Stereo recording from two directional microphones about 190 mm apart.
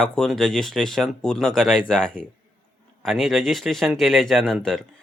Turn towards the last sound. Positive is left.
turn(degrees=5)  # may be behind; listen again after turning